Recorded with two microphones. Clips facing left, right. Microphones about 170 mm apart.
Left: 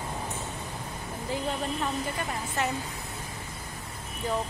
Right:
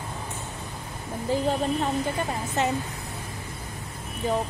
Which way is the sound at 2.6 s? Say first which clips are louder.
Right 5 dB; 20° right (ahead or behind).